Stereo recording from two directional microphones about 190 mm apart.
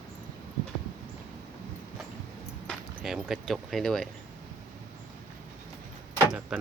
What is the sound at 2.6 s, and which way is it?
Speech, centre (ahead or behind).